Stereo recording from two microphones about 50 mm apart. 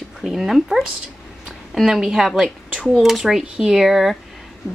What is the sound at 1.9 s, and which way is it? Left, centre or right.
A woman's voice, centre.